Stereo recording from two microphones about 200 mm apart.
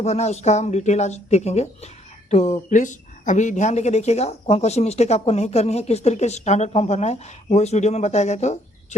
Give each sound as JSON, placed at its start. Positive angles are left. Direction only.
{"t": 0.0, "sound": "speech", "side_deg": 35}